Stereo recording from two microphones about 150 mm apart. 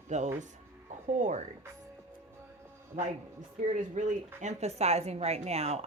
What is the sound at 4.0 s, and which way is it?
Speech, 55° right (ahead or behind).